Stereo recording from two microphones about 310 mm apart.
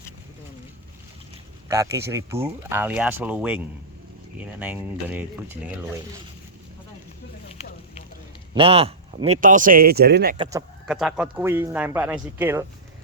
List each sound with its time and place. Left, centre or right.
1.6 s speech: centre
4.6 s speech: centre
7.6 s a sound: left
8.5 s speech: centre
10.3 s speech: centre
10.8 s speech: centre